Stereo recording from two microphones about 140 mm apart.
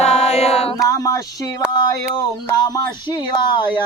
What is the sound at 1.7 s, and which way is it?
Speech, 30° left (ahead or behind).